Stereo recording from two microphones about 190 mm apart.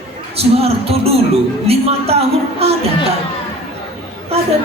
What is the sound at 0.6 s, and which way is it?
A woman's voice, 30° right (ahead or behind).